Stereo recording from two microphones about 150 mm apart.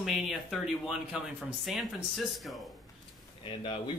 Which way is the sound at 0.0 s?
Centre (ahead or behind).